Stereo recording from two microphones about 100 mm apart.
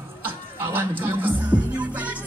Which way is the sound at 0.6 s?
20° right (ahead or behind).